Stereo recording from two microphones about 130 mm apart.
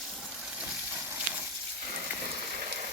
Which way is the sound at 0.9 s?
15° right (ahead or behind).